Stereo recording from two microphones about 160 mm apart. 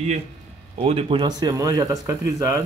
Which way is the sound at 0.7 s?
35° right (ahead or behind).